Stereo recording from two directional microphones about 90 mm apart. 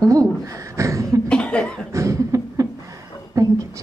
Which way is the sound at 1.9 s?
35° right (ahead or behind).